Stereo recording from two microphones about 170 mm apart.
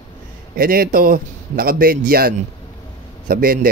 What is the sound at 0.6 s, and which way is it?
Speech, 60° right (ahead or behind).